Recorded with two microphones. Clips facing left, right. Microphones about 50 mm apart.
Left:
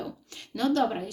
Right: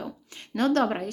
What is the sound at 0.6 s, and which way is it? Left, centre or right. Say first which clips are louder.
Speech: right 2 dB; right.